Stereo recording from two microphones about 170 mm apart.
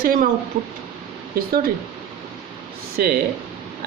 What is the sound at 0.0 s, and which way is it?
Speech, 55° right (ahead or behind).